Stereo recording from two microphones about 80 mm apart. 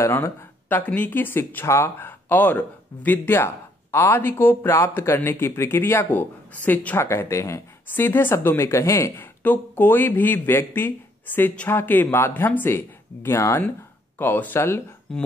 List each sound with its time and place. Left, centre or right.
0.0 s speech: left
7.0 s speech: left
7.9 s speech: left
15.1 s speech: centre